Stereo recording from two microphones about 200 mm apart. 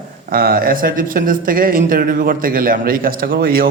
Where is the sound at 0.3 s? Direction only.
45° right (ahead or behind).